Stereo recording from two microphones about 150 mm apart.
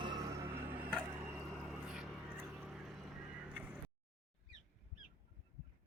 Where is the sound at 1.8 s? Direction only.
5° right (ahead or behind).